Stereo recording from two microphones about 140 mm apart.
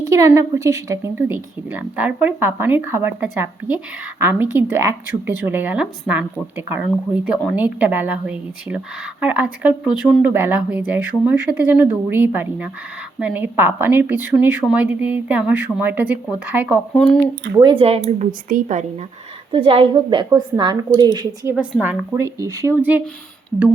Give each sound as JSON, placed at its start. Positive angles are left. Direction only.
{"t": 0.1, "sound": "speech", "side_deg": -20}
{"t": 17.6, "sound": "speech", "side_deg": -40}
{"t": 18.3, "sound": "a woman's voice", "side_deg": -75}
{"t": 19.5, "sound": "a woman's voice", "side_deg": -40}
{"t": 21.5, "sound": "speech", "side_deg": -10}